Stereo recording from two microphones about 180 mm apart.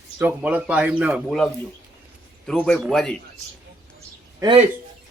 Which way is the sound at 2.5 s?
5° left (ahead or behind).